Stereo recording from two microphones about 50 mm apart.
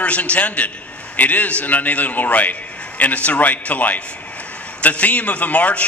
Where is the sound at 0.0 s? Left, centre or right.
Left.